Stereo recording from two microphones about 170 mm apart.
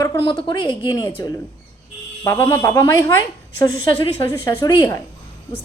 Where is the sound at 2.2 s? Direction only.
15° left (ahead or behind).